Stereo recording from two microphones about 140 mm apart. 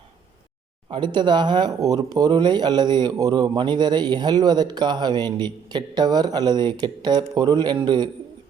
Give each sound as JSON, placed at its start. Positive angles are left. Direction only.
{"t": 0.9, "sound": "speech", "side_deg": -35}